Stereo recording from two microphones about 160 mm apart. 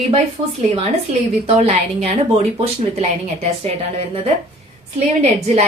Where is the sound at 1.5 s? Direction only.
40° right (ahead or behind).